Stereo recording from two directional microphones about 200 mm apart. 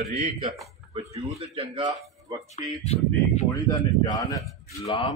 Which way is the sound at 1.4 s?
25° right (ahead or behind).